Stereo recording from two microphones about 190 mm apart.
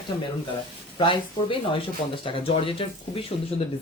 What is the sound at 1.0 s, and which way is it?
Speech, 25° left (ahead or behind).